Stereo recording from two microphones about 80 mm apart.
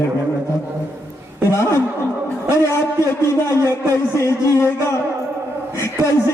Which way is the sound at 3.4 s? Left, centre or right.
Left.